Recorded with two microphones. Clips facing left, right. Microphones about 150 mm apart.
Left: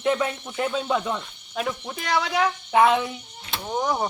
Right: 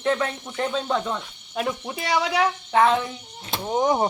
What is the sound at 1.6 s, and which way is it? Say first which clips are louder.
Speech: right 2 dB; 5° right (ahead or behind).